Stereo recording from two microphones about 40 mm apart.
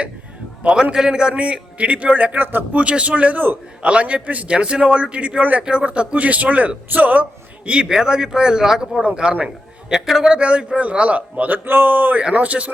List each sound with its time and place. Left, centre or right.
0.7 s a man's voice: centre; by 2.4 s right
2.4 s speech: right
2.7 s a man's voice: right
7.9 s speech: centre
10.3 s a man's voice: right
11.4 s speech: right
12.3 s a man's voice: right